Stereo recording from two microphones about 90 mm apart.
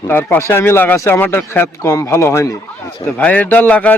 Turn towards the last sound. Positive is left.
turn(degrees=15)  # may be behind; listen again after turning